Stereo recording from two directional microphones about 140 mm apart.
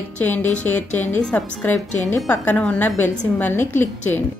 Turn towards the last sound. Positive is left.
turn(degrees=15)  # may be behind; listen again after turning